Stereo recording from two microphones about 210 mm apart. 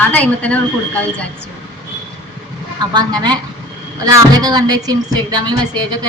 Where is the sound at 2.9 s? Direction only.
20° right (ahead or behind).